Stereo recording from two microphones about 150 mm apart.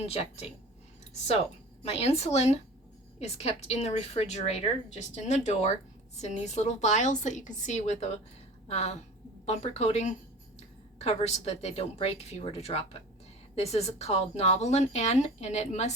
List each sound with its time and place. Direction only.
0.0 s speech: 45° left (ahead or behind)
1.8 s a woman's voice: 45° left (ahead or behind)